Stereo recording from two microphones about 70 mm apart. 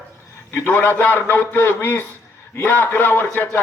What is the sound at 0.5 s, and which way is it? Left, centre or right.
A man's voice, left.